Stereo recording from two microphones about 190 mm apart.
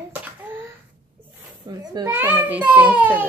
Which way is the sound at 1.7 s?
20° right (ahead or behind).